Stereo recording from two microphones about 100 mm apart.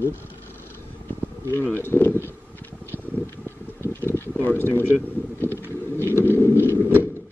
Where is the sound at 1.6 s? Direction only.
20° left (ahead or behind).